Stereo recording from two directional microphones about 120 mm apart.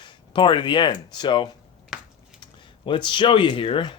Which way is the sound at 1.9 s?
Centre (ahead or behind).